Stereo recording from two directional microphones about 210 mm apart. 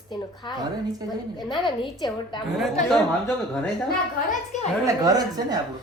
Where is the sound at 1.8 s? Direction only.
20° left (ahead or behind).